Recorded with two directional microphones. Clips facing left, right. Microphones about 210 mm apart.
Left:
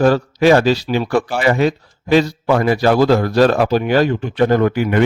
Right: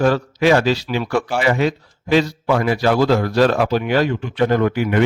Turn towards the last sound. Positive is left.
turn(degrees=45)  # may be behind; listen again after turning